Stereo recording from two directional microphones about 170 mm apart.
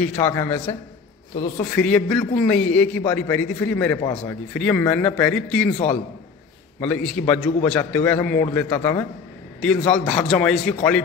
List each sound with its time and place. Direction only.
0.0 s a man's voice: 10° left (ahead or behind)
6.8 s a man's voice: 10° left (ahead or behind)